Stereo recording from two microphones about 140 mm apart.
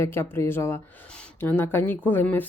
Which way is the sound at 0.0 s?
15° left (ahead or behind).